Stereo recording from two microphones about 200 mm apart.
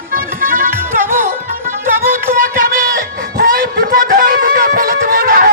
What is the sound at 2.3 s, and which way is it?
Music, 45° right (ahead or behind).